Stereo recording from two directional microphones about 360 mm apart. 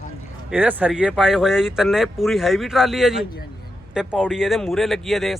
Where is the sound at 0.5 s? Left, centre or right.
Centre.